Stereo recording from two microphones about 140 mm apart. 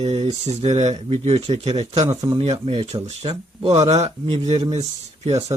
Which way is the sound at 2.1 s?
25° right (ahead or behind).